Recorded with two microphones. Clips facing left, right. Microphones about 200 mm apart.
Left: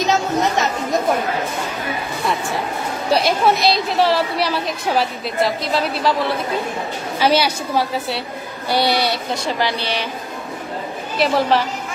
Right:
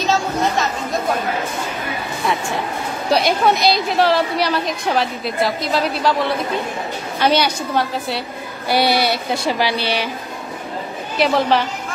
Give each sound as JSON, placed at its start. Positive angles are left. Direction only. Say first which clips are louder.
{"t": 0.0, "sound": "chatter", "louder": "left 1 dB", "side_deg": 20}
{"t": 3.1, "sound": "a woman's voice", "louder": "even", "side_deg": 0}
{"t": 7.2, "sound": "a woman's voice", "louder": "even", "side_deg": 5}
{"t": 8.6, "sound": "a woman's voice", "louder": "right 1 dB", "side_deg": -5}
{"t": 11.1, "sound": "a woman's voice", "louder": "right 1 dB", "side_deg": 0}